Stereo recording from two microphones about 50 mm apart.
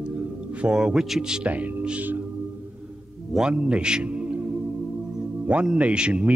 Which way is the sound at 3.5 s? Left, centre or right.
Right.